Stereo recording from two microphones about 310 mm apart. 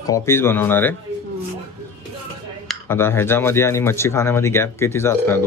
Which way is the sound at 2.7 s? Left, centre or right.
Centre.